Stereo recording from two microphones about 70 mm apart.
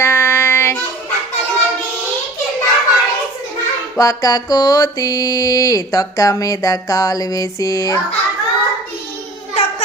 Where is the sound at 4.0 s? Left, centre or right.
Left.